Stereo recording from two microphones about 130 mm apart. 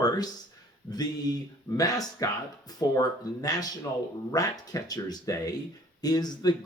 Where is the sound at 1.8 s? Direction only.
30° left (ahead or behind).